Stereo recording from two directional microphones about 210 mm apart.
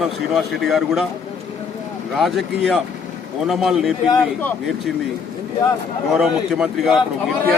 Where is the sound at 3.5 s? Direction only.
Centre (ahead or behind).